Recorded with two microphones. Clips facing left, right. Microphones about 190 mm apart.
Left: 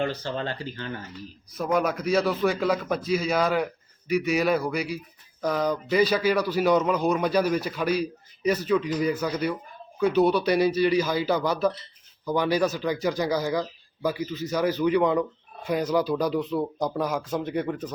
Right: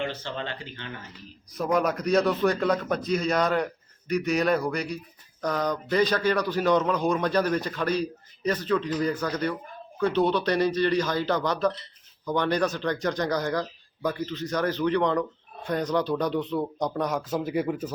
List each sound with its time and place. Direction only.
0.0 s speech: 40° left (ahead or behind)
1.5 s a man's voice: centre (ahead or behind)